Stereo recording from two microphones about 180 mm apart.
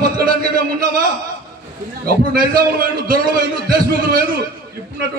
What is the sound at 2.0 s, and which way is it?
A man's voice, 55° right (ahead or behind).